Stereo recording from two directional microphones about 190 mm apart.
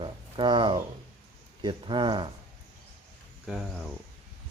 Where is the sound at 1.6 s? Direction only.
25° right (ahead or behind).